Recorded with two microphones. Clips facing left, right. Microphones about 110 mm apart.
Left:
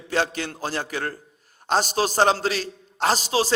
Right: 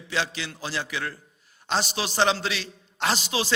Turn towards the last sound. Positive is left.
turn(degrees=40)  # may be behind; listen again after turning